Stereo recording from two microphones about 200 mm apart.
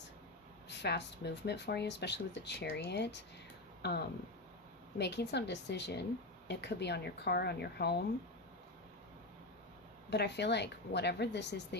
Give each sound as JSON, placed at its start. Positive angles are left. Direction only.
{"t": 0.7, "sound": "speech", "side_deg": 60}
{"t": 4.9, "sound": "speech", "side_deg": 60}
{"t": 10.1, "sound": "speech", "side_deg": 55}